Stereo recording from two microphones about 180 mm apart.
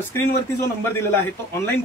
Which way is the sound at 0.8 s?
15° left (ahead or behind).